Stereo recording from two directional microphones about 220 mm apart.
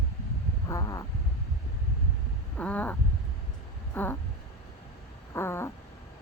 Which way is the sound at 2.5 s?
5° left (ahead or behind).